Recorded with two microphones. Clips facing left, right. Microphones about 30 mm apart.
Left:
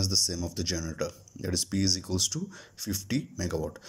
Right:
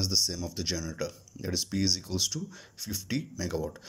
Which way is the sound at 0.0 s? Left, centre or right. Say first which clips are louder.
Even; centre.